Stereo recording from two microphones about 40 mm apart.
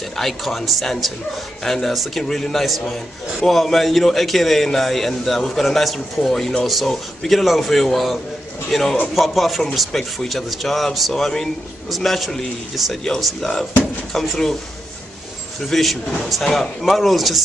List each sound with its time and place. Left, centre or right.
0.2 s a man's voice: centre
12.9 s a man's voice: centre
15.7 s a man's voice: centre